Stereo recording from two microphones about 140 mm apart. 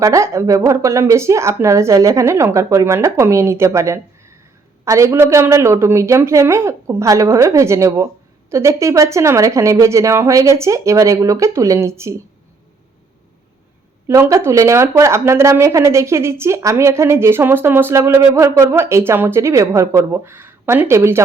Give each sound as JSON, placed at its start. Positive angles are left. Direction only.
{"t": 0.0, "sound": "a woman's voice", "side_deg": -20}
{"t": 14.1, "sound": "a woman's voice", "side_deg": -20}